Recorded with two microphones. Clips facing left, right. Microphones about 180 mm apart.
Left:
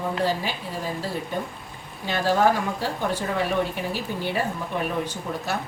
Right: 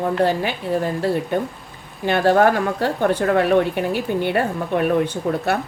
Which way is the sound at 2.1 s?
60° right (ahead or behind).